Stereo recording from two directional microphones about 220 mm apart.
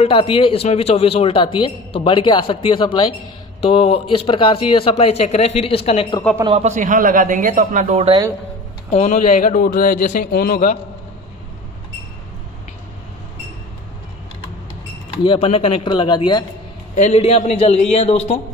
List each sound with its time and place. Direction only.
0.0 s a man's voice: 25° left (ahead or behind)
6.4 s a man's voice: 30° right (ahead or behind)
8.9 s a man's voice: 30° left (ahead or behind)
15.2 s a man's voice: 25° left (ahead or behind)
16.9 s a man's voice: 30° left (ahead or behind)